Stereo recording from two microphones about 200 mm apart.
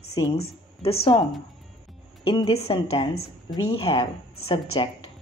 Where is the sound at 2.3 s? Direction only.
30° left (ahead or behind).